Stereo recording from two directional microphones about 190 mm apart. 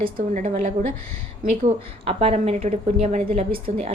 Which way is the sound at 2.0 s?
30° right (ahead or behind).